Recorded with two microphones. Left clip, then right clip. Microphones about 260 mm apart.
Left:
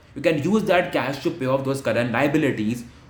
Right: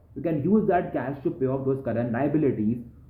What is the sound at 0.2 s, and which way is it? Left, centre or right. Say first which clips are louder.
Speech: left 4 dB; centre.